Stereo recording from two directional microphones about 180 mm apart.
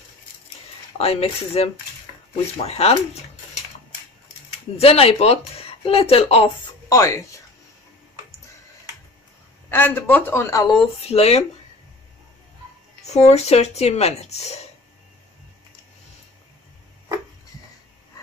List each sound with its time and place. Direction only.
0.9 s speech: 35° left (ahead or behind)
4.7 s speech: 35° left (ahead or behind)
6.9 s speech: 15° left (ahead or behind)
9.7 s speech: 10° left (ahead or behind)
11.0 s speech: 35° left (ahead or behind)
13.0 s speech: 35° left (ahead or behind)